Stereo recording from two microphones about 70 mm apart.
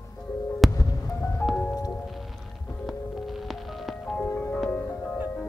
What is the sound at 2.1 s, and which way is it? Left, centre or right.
Music, centre.